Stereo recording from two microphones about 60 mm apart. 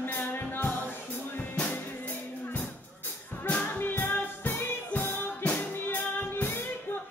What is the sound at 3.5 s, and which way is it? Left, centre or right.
Music, left.